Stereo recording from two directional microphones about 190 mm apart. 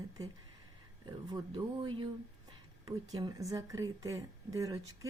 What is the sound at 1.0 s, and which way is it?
A woman's voice, 20° right (ahead or behind).